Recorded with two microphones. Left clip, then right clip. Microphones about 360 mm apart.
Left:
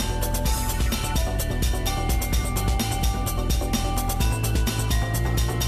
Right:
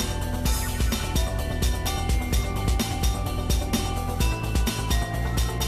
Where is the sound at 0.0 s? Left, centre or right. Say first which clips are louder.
Left 2 dB; centre.